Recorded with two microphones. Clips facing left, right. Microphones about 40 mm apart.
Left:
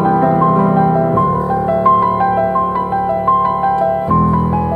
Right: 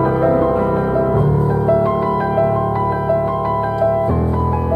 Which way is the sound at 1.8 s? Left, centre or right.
Left.